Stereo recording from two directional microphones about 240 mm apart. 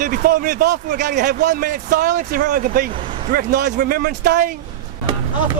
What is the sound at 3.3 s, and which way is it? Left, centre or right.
A man's voice, right.